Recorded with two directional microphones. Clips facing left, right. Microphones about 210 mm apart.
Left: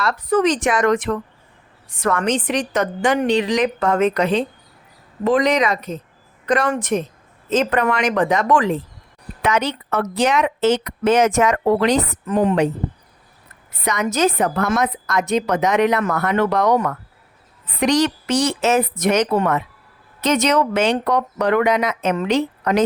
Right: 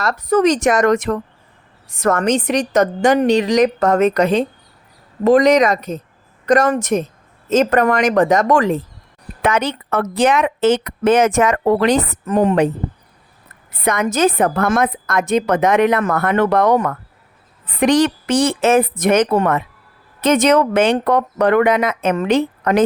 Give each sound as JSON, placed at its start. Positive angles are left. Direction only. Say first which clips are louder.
{"t": 0.0, "sound": "a woman's voice", "louder": "right 3 dB", "side_deg": -40}
{"t": 13.8, "sound": "speech", "louder": "right 3 dB", "side_deg": -55}